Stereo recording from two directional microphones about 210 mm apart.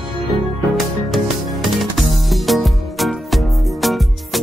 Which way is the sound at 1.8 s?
Centre (ahead or behind).